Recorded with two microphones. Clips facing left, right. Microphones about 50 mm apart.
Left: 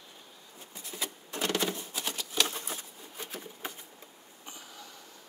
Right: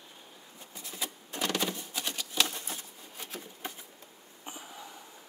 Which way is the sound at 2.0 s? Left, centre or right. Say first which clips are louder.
Right 1 dB; centre.